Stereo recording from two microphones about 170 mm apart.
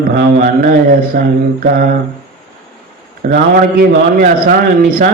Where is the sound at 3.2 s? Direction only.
55° right (ahead or behind).